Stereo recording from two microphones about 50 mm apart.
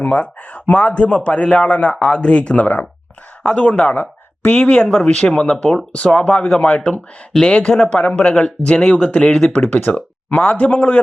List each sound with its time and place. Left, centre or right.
0.0 s a man's voice: left